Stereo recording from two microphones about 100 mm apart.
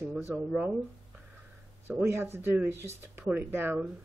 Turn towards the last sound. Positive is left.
turn(degrees=-20)  # may be behind; listen again after turning